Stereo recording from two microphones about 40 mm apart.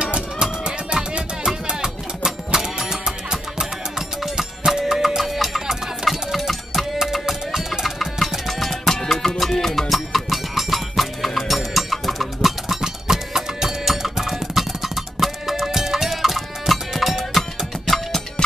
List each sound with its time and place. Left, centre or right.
0.0 s music: right; by 12.3 s centre
12.4 s music: centre
17.4 s music: centre